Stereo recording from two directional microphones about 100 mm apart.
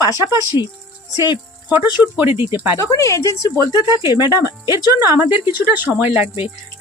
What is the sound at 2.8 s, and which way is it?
Speech, 35° left (ahead or behind).